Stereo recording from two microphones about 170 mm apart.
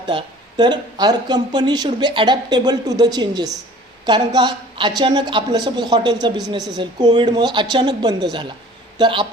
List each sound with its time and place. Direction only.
0.0 s speech: 25° right (ahead or behind)